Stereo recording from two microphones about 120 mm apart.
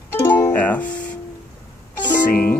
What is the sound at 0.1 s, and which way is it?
Music, 20° left (ahead or behind).